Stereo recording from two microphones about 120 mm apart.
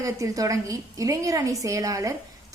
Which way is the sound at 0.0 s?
30° right (ahead or behind).